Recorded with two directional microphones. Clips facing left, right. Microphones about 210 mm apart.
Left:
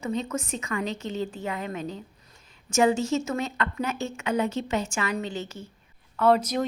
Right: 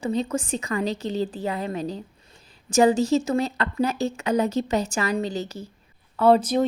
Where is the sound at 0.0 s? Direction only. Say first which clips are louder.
Right 4 dB; 35° right (ahead or behind).